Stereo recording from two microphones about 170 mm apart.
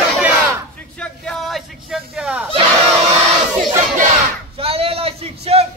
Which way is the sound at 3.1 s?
45° right (ahead or behind).